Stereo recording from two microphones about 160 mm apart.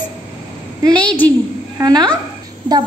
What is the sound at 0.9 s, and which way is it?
Speech, 10° left (ahead or behind).